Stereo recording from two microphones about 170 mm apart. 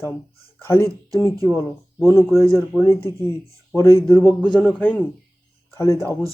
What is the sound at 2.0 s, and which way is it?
Speech, 15° left (ahead or behind).